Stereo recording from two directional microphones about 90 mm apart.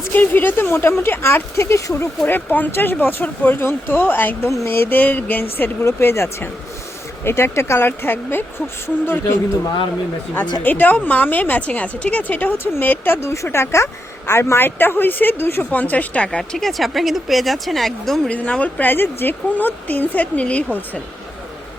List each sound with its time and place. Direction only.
0.0 s a woman's voice: 20° left (ahead or behind)
10.6 s a woman's voice: 20° left (ahead or behind); by 18.2 s centre (ahead or behind)
18.3 s a woman's voice: 15° left (ahead or behind)